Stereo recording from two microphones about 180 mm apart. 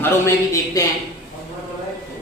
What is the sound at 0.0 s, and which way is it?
Speech, 15° left (ahead or behind).